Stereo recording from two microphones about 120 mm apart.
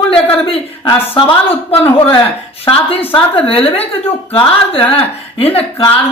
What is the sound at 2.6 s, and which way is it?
Speech, 50° left (ahead or behind).